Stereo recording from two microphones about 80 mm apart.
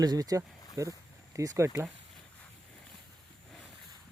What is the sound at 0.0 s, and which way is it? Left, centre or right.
Speech, right.